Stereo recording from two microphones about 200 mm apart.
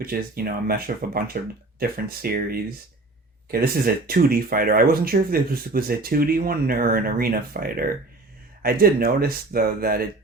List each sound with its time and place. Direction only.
0.0 s speech: 50° right (ahead or behind)